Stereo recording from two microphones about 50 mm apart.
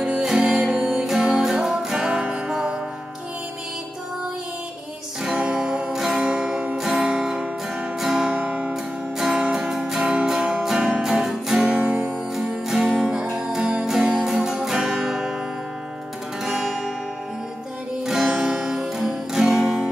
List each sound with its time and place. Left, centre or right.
0.2 s music: centre
5.2 s music: centre
5.9 s music: centre
6.8 s music: centre
8.3 s music: right
9.2 s music: centre
16.4 s music: centre
18.0 s music: centre